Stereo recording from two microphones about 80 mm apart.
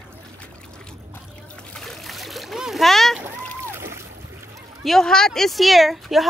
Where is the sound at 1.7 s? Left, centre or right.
Centre.